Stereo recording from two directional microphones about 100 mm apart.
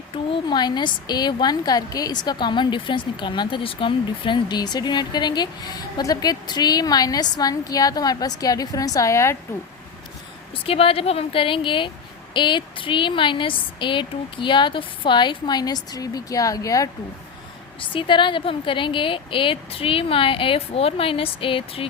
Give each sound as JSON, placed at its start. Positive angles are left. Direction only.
{"t": 0.1, "sound": "a woman's voice", "side_deg": 55}
{"t": 10.5, "sound": "a woman's voice", "side_deg": 70}
{"t": 17.7, "sound": "a woman's voice", "side_deg": 55}